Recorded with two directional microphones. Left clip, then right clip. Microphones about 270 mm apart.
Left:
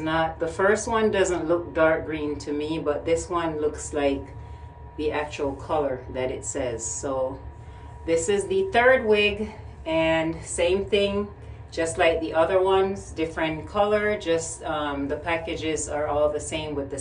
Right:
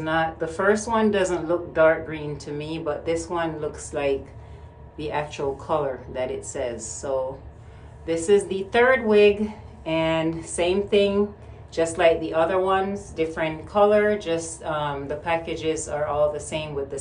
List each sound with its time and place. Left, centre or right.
0.0 s a woman's voice: centre
8.1 s a woman's voice: centre